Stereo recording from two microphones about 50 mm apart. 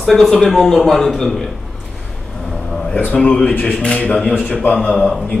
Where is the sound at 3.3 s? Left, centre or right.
Centre.